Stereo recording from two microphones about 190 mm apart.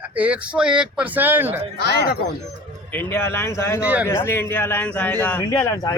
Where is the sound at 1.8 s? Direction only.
55° left (ahead or behind).